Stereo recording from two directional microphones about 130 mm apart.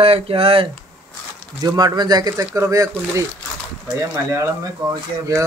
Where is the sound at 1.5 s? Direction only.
30° right (ahead or behind).